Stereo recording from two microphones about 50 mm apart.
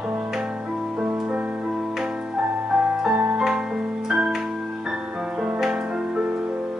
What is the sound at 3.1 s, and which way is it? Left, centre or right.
Music, right.